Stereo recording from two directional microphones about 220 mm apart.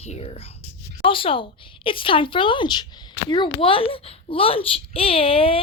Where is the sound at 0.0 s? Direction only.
25° left (ahead or behind).